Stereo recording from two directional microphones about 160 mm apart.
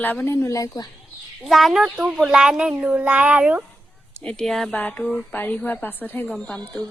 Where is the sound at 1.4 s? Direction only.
Centre (ahead or behind).